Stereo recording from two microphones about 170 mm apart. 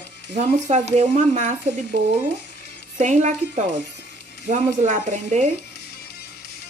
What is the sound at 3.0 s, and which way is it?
Speech, 45° right (ahead or behind).